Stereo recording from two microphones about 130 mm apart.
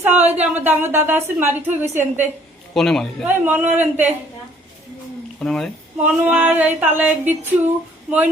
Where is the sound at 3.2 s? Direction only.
15° right (ahead or behind).